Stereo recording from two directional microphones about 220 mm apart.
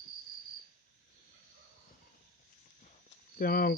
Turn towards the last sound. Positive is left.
turn(degrees=40)  # may be behind; listen again after turning